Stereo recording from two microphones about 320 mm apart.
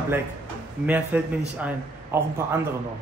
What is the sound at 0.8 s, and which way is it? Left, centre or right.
A man's voice, centre.